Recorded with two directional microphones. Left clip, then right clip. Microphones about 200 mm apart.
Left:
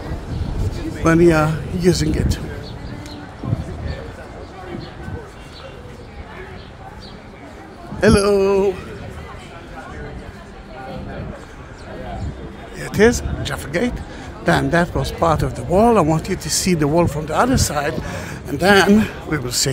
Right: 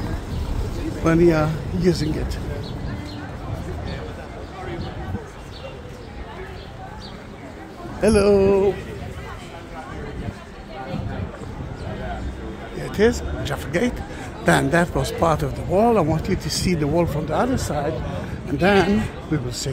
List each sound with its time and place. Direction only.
1.0 s speech: 15° left (ahead or behind)
8.0 s speech: 20° left (ahead or behind)
12.7 s a man's voice: 20° left (ahead or behind)